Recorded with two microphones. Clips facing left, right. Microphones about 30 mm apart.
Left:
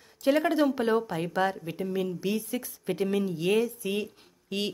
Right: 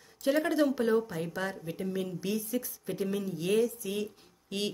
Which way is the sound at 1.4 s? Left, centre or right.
Centre.